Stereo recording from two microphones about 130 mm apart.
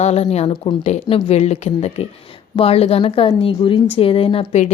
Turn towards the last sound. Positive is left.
turn(degrees=45)  # may be behind; listen again after turning